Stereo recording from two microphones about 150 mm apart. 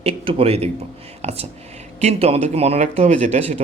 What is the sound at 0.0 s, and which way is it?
Speech, 40° right (ahead or behind).